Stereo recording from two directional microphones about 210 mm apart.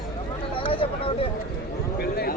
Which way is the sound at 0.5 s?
25° left (ahead or behind).